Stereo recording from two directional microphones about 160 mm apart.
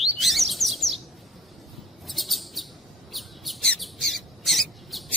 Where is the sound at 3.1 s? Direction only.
Centre (ahead or behind).